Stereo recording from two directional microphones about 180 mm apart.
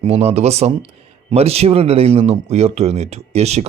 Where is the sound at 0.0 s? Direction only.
35° right (ahead or behind).